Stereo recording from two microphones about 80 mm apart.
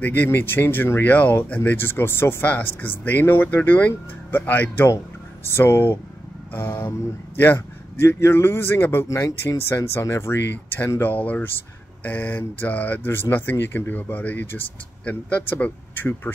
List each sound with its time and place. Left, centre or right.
0.0 s speech: left
9.0 s speech: left